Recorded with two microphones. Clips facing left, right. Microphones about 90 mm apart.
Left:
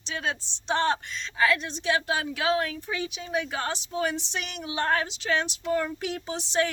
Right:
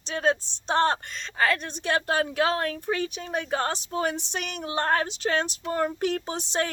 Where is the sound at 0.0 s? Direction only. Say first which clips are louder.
Right 6 dB; 40° right (ahead or behind).